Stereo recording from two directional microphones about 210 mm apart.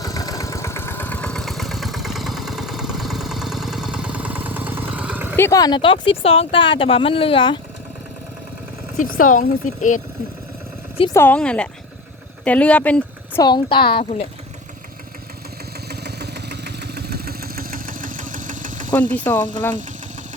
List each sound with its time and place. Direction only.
0.0 s vehicle: 15° left (ahead or behind); by 5.4 s 5° right (ahead or behind)
5.4 s speech: 15° left (ahead or behind)
9.0 s speech: 40° left (ahead or behind)
11.1 s speech: 10° left (ahead or behind)
13.4 s speech: 20° left (ahead or behind)
15.9 s vehicle: 50° right (ahead or behind)
19.1 s speech: 10° left (ahead or behind)